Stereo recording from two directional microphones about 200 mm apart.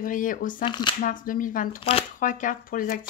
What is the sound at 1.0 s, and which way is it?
Speech, 40° left (ahead or behind).